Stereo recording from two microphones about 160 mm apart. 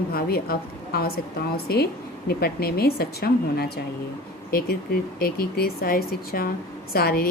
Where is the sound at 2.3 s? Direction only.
70° left (ahead or behind).